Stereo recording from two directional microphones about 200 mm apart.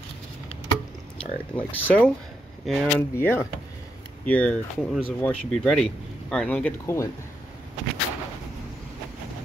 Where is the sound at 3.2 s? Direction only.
10° left (ahead or behind).